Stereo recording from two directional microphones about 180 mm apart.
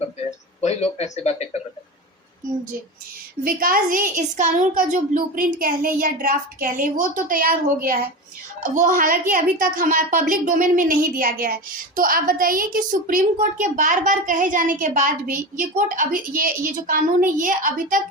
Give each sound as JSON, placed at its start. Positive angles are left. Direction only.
{"t": 0.3, "sound": "speech", "side_deg": 40}
{"t": 3.4, "sound": "a woman's voice", "side_deg": -55}
{"t": 8.6, "sound": "a woman's voice", "side_deg": -45}